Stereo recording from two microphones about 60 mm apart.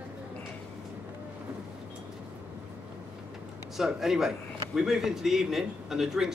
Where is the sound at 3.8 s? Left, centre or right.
Centre.